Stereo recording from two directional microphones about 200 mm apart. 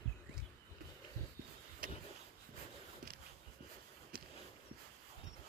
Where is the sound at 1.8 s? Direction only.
45° right (ahead or behind).